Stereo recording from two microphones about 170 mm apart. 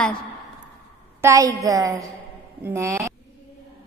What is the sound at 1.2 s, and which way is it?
A woman's voice, 20° right (ahead or behind).